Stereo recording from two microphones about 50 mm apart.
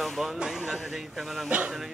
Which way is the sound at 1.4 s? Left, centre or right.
Right.